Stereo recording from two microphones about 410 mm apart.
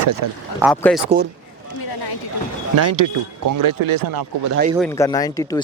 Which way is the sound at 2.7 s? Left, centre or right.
Right.